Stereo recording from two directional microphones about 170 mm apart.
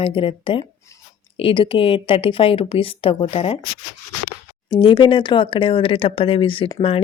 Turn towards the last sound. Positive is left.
turn(degrees=35)  # may be behind; listen again after turning